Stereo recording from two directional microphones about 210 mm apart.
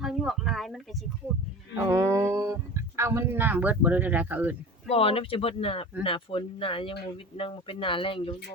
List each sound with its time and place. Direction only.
0.0 s a sound: centre (ahead or behind)
1.7 s speech: 15° right (ahead or behind)
4.9 s speech: 25° left (ahead or behind)